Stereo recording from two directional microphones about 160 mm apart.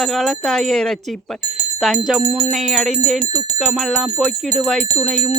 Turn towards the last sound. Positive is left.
turn(degrees=0)  # may be behind; listen again after turning